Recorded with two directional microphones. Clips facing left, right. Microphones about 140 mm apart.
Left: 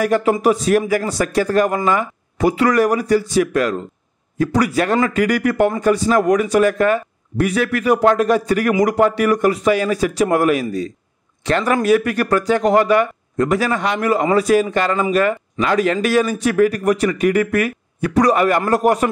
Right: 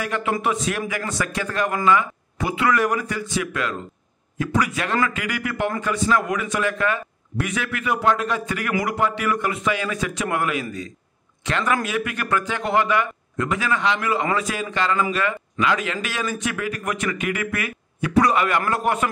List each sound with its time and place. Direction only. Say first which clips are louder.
0.0 s speech: left 8 dB; 40° left (ahead or behind)